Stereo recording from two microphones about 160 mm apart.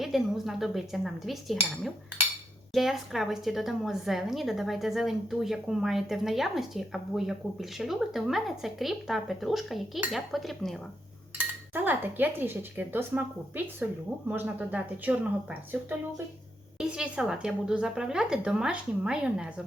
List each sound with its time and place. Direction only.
0.0 s a woman's voice: centre (ahead or behind)
11.3 s a woman's voice: 10° right (ahead or behind)